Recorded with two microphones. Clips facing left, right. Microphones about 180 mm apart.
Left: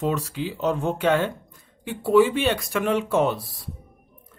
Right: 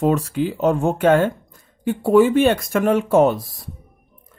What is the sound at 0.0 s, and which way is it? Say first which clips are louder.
Speech: right 7 dB; 50° right (ahead or behind).